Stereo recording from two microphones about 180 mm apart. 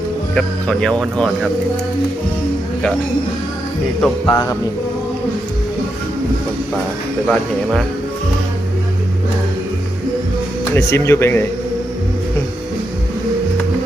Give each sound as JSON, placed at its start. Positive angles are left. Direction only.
{"t": 0.3, "sound": "speech", "side_deg": 5}
{"t": 4.3, "sound": "a sound", "side_deg": 20}
{"t": 7.3, "sound": "speech", "side_deg": 0}
{"t": 10.8, "sound": "speech", "side_deg": 15}